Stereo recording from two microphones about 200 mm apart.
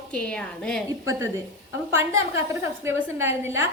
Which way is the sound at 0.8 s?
15° right (ahead or behind).